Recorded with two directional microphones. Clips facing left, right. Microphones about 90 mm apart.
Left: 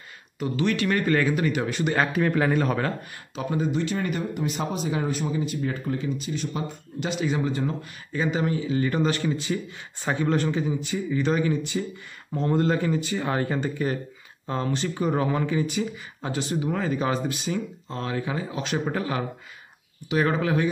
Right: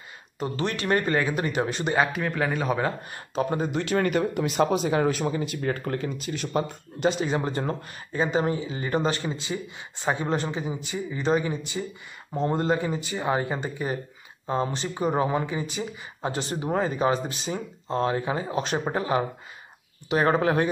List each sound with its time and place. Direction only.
0.4 s speech: 35° right (ahead or behind)
2.1 s a man's voice: centre (ahead or behind)
3.3 s speech: 45° right (ahead or behind)
3.7 s speech: 70° right (ahead or behind)
7.0 s speech: 35° right (ahead or behind)
8.1 s speech: 30° right (ahead or behind)
20.1 s speech: 40° right (ahead or behind)